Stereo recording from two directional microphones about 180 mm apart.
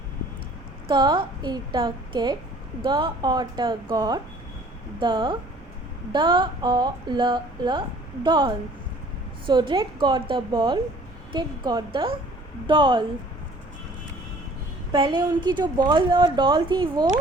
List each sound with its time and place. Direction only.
0.9 s speech: 25° right (ahead or behind)
14.9 s speech: 25° right (ahead or behind)